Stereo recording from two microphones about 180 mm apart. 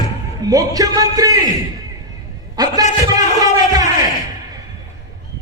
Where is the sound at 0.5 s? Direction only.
20° right (ahead or behind).